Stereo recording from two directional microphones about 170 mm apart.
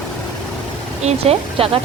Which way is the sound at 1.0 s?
40° right (ahead or behind).